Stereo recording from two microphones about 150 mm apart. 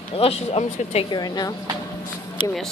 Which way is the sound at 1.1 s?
25° left (ahead or behind).